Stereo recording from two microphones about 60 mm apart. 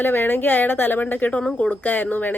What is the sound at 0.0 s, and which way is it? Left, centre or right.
A woman's voice, left.